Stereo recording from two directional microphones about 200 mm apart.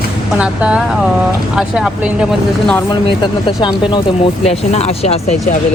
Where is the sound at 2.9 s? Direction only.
25° left (ahead or behind).